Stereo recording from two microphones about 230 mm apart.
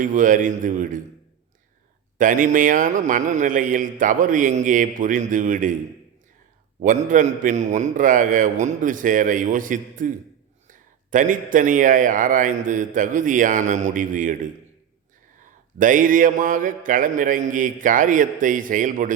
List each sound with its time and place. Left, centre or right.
0.0 s a man's voice: right
2.1 s a man's voice: right
6.8 s a man's voice: right